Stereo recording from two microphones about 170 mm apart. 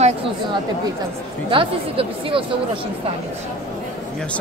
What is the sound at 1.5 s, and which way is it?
Speech, 30° right (ahead or behind).